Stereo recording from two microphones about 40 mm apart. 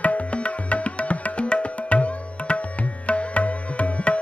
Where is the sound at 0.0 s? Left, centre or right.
Left.